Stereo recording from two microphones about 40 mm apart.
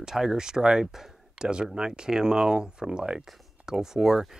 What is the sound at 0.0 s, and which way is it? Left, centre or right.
Speech, centre.